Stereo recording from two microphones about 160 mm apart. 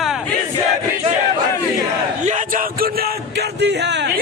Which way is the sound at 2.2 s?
55° right (ahead or behind).